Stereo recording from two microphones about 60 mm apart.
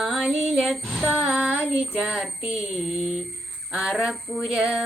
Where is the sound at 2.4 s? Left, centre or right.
Centre.